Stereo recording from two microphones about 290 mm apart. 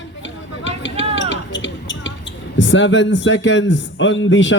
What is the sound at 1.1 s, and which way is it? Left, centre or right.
Basketball bounce, left.